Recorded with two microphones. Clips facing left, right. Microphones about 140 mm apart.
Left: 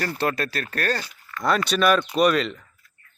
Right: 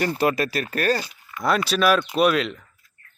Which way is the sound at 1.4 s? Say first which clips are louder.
Even; centre (ahead or behind).